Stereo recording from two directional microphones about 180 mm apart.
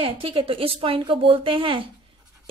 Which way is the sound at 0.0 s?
30° right (ahead or behind).